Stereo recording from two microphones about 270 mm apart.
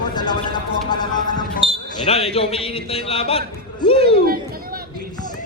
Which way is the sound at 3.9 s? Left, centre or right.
Right.